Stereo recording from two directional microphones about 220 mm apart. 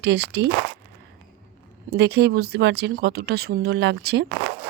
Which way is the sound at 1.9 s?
50° right (ahead or behind).